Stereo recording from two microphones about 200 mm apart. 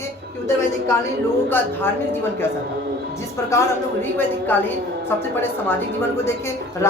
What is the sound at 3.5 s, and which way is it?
Speech, 15° left (ahead or behind).